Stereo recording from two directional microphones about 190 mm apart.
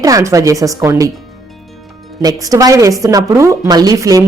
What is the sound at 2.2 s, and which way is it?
A woman's voice, 20° right (ahead or behind).